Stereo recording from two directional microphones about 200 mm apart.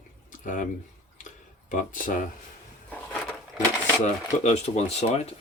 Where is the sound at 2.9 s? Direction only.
5° left (ahead or behind).